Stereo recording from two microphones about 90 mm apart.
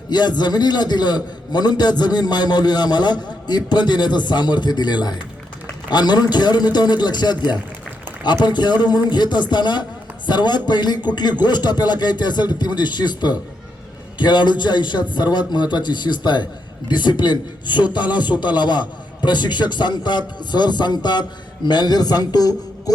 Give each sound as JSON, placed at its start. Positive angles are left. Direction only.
{"t": 0.1, "sound": "a man's voice", "side_deg": 50}